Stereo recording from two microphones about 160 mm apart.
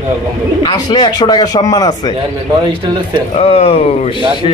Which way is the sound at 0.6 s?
25° left (ahead or behind).